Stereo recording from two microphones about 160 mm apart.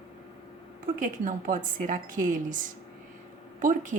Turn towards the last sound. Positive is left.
turn(degrees=-55)  # may be behind; listen again after turning